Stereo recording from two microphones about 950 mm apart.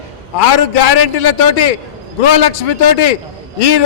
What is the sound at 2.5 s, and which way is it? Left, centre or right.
Speech, left.